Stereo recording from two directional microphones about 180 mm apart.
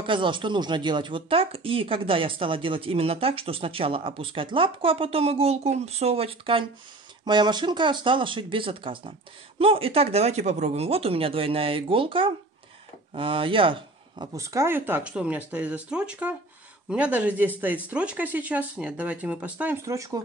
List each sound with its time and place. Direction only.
0.0 s speech: 25° right (ahead or behind)